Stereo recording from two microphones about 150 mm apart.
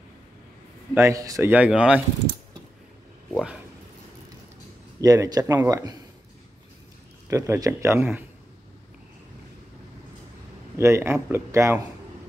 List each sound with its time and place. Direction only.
0.9 s a man's voice: 20° right (ahead or behind)
1.5 s speech: 10° right (ahead or behind)
5.0 s a man's voice: 25° right (ahead or behind)
7.2 s speech: 20° right (ahead or behind)
10.8 s speech: 20° right (ahead or behind)